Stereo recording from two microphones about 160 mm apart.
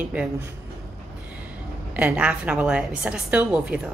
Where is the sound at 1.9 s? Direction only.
10° right (ahead or behind).